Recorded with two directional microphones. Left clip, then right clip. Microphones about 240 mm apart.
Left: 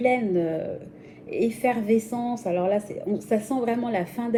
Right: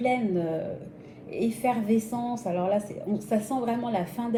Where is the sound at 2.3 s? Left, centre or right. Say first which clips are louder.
Left 3 dB; centre.